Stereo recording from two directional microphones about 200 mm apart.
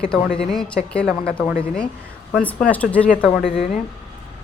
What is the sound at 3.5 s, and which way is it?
Speech, 35° left (ahead or behind).